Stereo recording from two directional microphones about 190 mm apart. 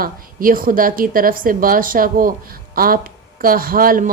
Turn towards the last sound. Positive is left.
turn(degrees=-50)  # may be behind; listen again after turning